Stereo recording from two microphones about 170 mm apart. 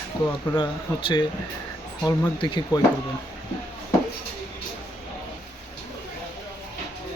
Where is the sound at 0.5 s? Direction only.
25° left (ahead or behind).